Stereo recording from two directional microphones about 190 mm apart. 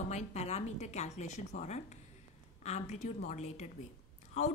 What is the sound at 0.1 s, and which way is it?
Speech, 35° left (ahead or behind).